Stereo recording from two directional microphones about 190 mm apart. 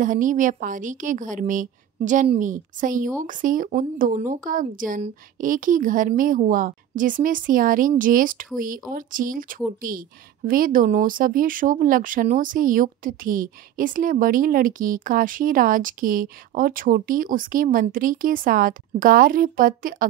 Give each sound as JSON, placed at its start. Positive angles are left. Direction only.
{"t": 0.0, "sound": "speech", "side_deg": -45}